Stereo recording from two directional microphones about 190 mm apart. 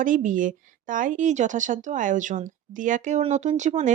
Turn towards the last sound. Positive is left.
turn(degrees=-35)  # may be behind; listen again after turning